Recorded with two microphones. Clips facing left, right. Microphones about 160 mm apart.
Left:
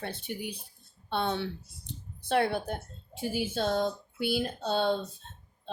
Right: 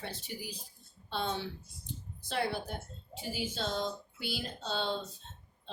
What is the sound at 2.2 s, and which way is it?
Speech, 60° left (ahead or behind).